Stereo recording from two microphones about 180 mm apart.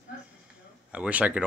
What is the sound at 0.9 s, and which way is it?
Speech, 5° right (ahead or behind).